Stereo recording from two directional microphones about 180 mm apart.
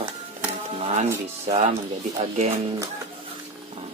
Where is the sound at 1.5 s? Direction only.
40° right (ahead or behind).